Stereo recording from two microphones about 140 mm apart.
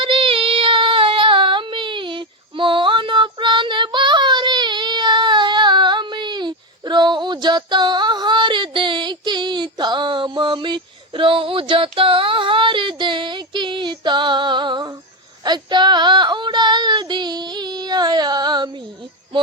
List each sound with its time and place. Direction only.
0.0 s child singing: 40° right (ahead or behind)
11.7 s female singing: 40° right (ahead or behind)